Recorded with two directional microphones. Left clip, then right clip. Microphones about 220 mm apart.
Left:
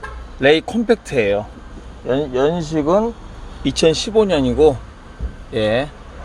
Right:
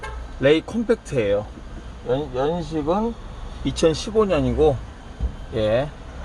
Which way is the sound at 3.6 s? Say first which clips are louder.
Left 5 dB; 20° left (ahead or behind).